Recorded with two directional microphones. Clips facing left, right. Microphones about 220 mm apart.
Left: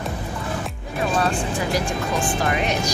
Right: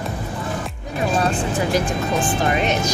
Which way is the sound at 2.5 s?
20° right (ahead or behind).